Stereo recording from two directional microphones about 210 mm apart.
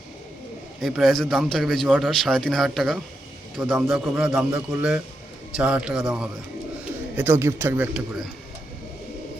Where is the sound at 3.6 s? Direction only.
15° right (ahead or behind).